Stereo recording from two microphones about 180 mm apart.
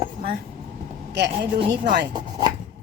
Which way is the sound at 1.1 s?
70° right (ahead or behind).